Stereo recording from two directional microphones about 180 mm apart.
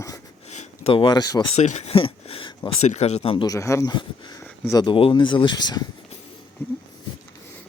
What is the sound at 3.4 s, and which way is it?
Speech, 15° left (ahead or behind).